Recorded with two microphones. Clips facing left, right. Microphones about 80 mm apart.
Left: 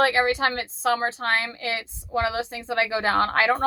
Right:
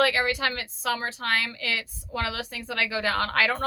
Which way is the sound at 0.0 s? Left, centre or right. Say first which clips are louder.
Left 3 dB; left.